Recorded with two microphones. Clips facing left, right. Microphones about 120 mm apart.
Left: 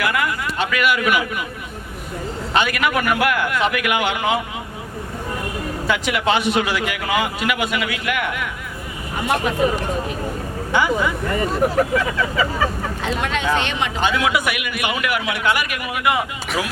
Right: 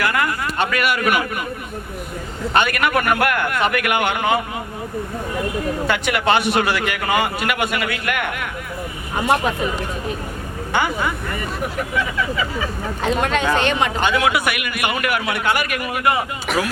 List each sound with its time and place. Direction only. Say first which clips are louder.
0.0 s a man's voice: right 1 dB; 45° right (ahead or behind)
2.5 s a man's voice: right 2 dB; 50° right (ahead or behind)
5.9 s a man's voice: even; 60° right (ahead or behind)
10.7 s a man's voice: left 2 dB; 60° right (ahead or behind)
11.6 s speech: left 5 dB; 40° left (ahead or behind)
13.0 s a man's voice: right 5 dB; 45° right (ahead or behind)